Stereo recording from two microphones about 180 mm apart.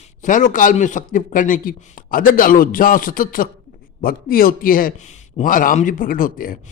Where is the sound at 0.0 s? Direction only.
45° left (ahead or behind).